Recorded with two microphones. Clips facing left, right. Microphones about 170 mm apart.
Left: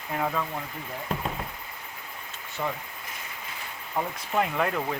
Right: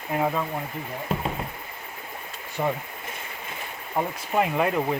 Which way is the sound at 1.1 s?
5° right (ahead or behind).